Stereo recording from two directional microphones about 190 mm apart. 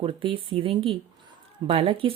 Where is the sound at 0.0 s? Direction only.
30° right (ahead or behind).